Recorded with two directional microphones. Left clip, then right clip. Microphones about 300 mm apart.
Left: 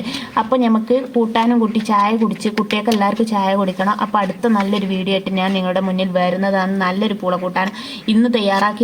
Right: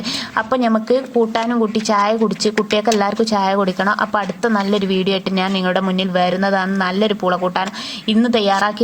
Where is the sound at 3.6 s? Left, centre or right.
Right.